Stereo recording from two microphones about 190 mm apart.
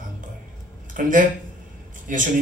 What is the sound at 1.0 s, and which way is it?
A man's voice, 45° right (ahead or behind).